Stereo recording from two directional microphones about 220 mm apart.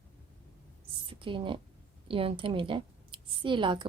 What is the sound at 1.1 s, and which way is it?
A woman's voice, 25° right (ahead or behind).